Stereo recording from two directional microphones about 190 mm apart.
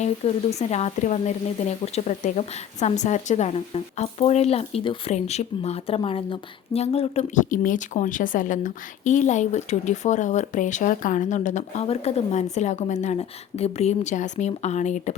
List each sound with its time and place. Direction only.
0.0 s speech: 35° left (ahead or behind)